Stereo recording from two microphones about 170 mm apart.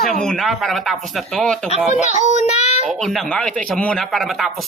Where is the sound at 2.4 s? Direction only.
40° left (ahead or behind).